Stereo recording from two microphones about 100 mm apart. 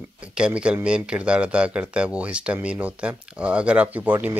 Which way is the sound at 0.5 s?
10° right (ahead or behind).